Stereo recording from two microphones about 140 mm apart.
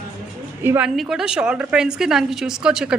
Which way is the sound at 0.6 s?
15° right (ahead or behind).